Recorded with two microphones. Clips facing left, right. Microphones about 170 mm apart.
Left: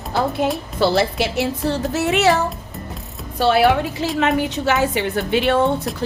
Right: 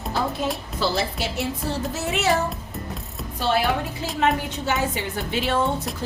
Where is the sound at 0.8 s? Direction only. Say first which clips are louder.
Left 8 dB; 70° left (ahead or behind).